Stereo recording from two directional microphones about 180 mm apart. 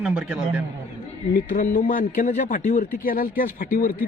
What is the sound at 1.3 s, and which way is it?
Speech, 50° left (ahead or behind).